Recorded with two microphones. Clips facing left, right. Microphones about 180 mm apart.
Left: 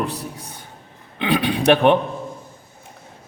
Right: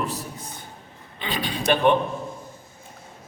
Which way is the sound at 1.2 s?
65° left (ahead or behind).